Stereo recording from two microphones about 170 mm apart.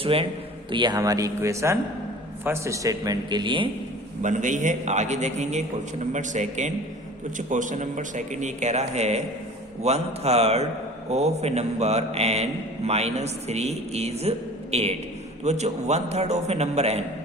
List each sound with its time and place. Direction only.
0.0 s a man's voice: 35° right (ahead or behind)
4.2 s a man's voice: 45° right (ahead or behind)